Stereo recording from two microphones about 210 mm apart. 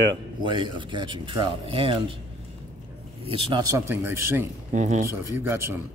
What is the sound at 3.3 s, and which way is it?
Speech, 20° right (ahead or behind).